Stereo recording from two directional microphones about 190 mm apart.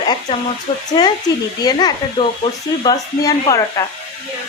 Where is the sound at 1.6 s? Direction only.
20° left (ahead or behind).